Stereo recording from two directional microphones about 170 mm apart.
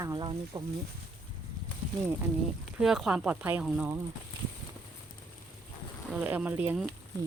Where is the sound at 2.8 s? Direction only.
Centre (ahead or behind).